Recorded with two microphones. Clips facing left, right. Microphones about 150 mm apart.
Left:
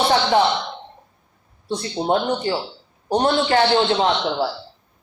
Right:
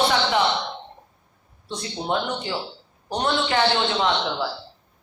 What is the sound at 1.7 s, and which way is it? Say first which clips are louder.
Speech: left 6 dB; 35° left (ahead or behind).